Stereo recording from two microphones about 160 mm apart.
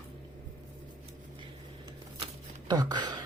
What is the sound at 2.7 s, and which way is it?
Speech, 25° right (ahead or behind).